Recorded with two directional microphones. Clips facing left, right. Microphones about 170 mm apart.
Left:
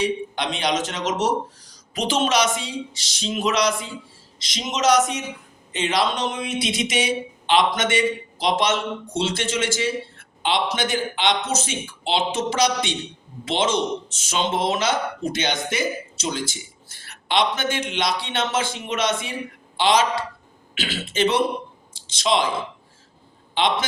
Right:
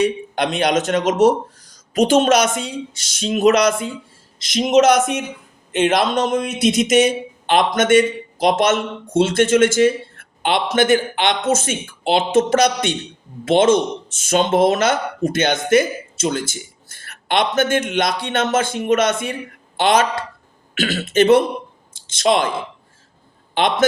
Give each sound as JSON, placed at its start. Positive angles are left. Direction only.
{"t": 0.5, "sound": "a man's voice", "side_deg": -50}
{"t": 23.6, "sound": "a man's voice", "side_deg": -50}